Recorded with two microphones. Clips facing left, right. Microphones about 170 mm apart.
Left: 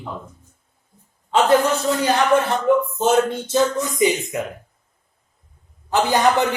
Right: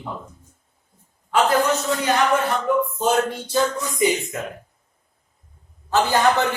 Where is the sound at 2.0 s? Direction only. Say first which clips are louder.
Left 4 dB; 30° left (ahead or behind).